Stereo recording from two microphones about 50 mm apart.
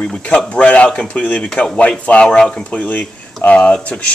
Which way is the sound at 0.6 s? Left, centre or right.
Left.